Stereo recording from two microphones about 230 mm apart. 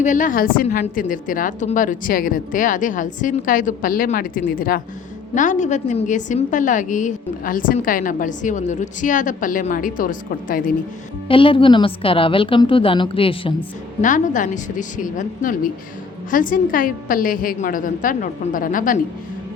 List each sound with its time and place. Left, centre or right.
0.0 s a woman's voice: left
11.3 s a woman's voice: left
14.0 s a woman's voice: left